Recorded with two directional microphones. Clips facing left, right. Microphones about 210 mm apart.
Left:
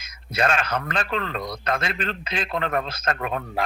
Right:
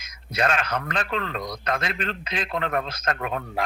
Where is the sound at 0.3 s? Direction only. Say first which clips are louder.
Left 1 dB; 30° left (ahead or behind).